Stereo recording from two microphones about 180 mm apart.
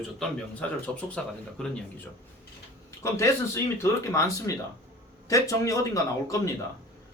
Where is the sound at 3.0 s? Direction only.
15° left (ahead or behind).